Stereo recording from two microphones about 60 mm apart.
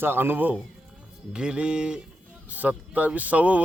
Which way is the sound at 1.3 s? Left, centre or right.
Centre.